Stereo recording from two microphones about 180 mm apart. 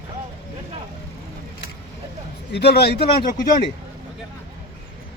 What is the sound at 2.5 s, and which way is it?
Speech, 65° left (ahead or behind).